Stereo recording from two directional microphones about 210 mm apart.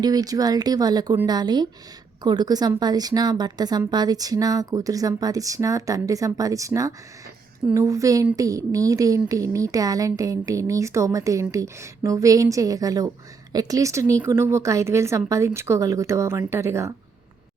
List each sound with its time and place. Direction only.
0.0 s a woman's voice: 20° right (ahead or behind)